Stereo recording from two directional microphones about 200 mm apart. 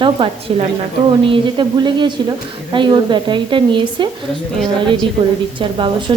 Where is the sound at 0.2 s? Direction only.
25° right (ahead or behind).